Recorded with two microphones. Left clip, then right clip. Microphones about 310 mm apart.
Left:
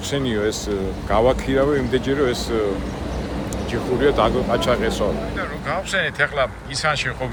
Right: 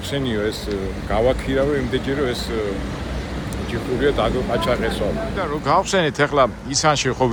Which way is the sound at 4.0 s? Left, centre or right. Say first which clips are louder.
Left 2 dB; centre.